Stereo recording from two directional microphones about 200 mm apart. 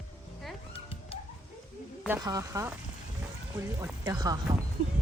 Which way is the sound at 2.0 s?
15° right (ahead or behind).